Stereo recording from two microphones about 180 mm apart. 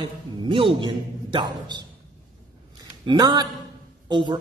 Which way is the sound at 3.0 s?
25° right (ahead or behind).